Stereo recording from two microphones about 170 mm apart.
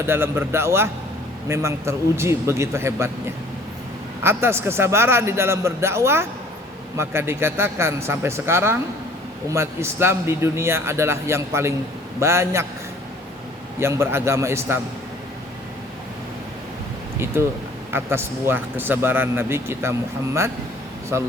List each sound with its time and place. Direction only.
0.0 s speech: 15° right (ahead or behind)
4.2 s speech: 15° right (ahead or behind)
13.7 s speech: 15° right (ahead or behind)
17.9 s speech: 15° right (ahead or behind)